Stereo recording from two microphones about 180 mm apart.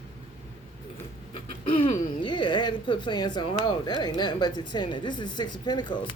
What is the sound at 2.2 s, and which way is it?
Speech, 25° left (ahead or behind).